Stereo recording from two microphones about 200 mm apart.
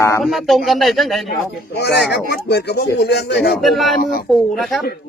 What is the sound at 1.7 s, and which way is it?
Speech, 55° left (ahead or behind).